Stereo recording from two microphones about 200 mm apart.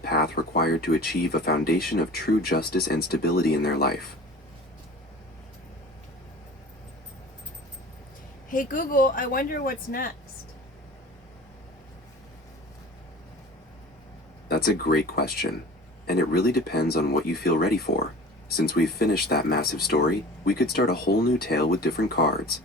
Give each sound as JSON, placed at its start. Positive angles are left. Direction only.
{"t": 0.0, "sound": "speech", "side_deg": 50}
{"t": 8.4, "sound": "speech", "side_deg": 40}
{"t": 14.4, "sound": "speech", "side_deg": 50}